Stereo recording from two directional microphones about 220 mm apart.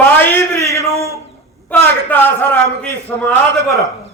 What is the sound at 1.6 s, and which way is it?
A man's voice, 10° left (ahead or behind).